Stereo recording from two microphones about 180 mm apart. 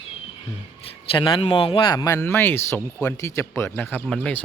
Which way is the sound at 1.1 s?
30° left (ahead or behind).